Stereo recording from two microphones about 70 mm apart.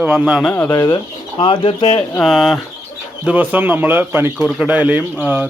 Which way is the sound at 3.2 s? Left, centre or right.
Right.